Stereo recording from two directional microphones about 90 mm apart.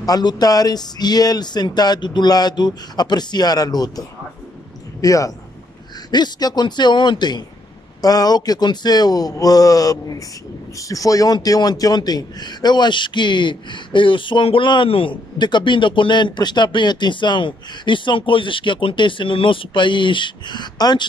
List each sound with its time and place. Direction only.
0.0 s speech: 50° left (ahead or behind)
5.0 s speech: 40° left (ahead or behind)
6.1 s a man's voice: 55° left (ahead or behind)